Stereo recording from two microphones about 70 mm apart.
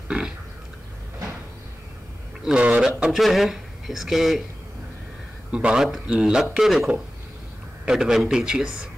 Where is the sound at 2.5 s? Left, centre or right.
Centre.